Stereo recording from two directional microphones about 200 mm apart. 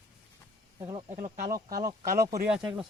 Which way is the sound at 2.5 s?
5° right (ahead or behind).